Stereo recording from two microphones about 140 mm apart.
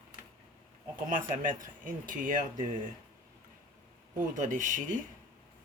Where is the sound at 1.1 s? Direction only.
70° right (ahead or behind).